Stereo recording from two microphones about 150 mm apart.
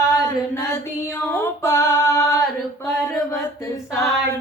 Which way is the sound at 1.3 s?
15° left (ahead or behind).